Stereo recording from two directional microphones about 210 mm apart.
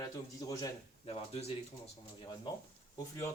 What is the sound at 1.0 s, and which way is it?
Speech, 25° left (ahead or behind).